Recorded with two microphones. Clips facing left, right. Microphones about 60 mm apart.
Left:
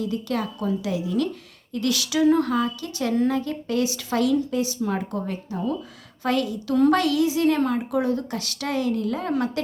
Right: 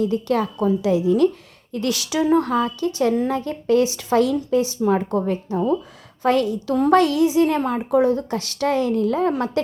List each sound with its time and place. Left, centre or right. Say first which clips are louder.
0.0 s speech: right 6 dB; right